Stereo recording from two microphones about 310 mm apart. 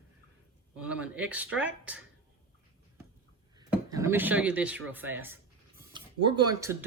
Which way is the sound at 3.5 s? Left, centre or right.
Centre.